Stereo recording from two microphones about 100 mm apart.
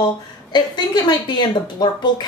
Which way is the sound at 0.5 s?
45° left (ahead or behind).